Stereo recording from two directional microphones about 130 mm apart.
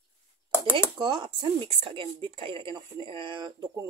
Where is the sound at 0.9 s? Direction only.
35° right (ahead or behind).